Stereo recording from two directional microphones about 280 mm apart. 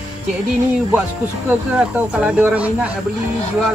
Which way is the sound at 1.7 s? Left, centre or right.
Centre.